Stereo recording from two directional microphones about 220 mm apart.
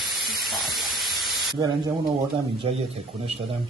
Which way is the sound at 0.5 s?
Centre (ahead or behind).